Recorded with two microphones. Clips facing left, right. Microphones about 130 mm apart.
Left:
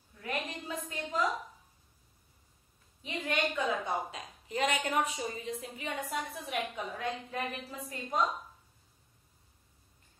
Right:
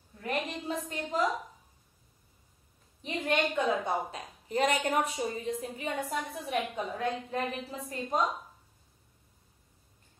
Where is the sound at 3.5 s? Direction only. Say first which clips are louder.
Right 3 dB; 35° right (ahead or behind).